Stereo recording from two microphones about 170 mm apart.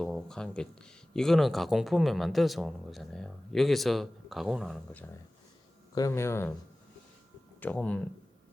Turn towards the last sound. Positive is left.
turn(degrees=5)  # may be behind; listen again after turning